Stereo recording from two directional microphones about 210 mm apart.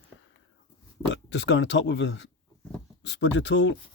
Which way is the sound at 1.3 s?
60° left (ahead or behind).